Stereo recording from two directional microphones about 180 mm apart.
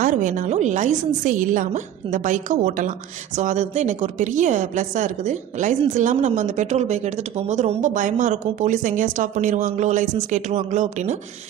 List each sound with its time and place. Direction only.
0.0 s a woman's voice: 45° right (ahead or behind)